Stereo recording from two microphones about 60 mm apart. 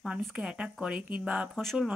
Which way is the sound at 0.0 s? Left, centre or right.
Centre.